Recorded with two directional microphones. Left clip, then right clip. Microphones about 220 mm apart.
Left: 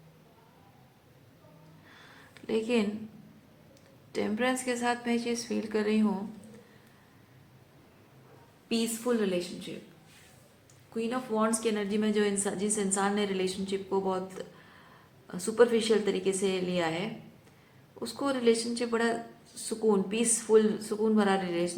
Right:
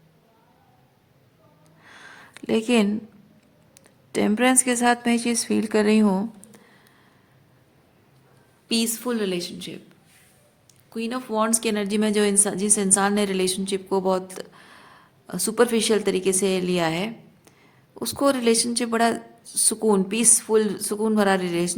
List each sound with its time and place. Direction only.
1.8 s a sound: 55° right (ahead or behind)
4.1 s a woman's voice: 50° right (ahead or behind)
8.7 s a woman's voice: 50° right (ahead or behind)
10.9 s a woman's voice: 50° right (ahead or behind)